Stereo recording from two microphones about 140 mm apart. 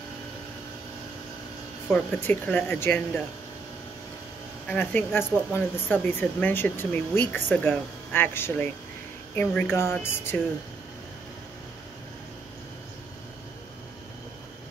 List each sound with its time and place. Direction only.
1.9 s speech: 10° left (ahead or behind)
4.6 s speech: 15° left (ahead or behind)